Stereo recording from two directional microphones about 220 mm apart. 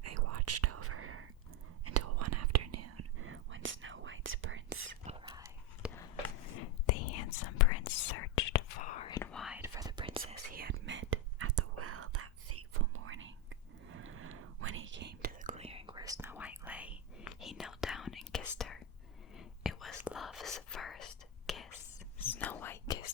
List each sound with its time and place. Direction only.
0.3 s whispering: 90° right; by 1.3 s 75° right (ahead or behind)
1.8 s whispering: 90° right; by 4.9 s 60° right (ahead or behind)
5.0 s whispering: 25° right (ahead or behind)
5.3 s whispering: 15° right (ahead or behind)
6.6 s whispering: 90° left
7.9 s whispering: 65° left (ahead or behind)
8.8 s whispering: 35° left (ahead or behind)
9.0 s whispering: 15° left (ahead or behind)
9.3 s whispering: centre (ahead or behind)
9.6 s whispering: 15° right (ahead or behind)
10.5 s whispering: 45° right (ahead or behind); by 23.0 s 15° left (ahead or behind)